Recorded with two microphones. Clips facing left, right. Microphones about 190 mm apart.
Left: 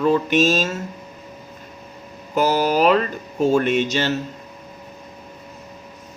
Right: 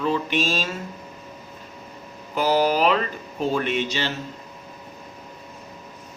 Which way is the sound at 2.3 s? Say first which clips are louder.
Left 2 dB; 45° left (ahead or behind).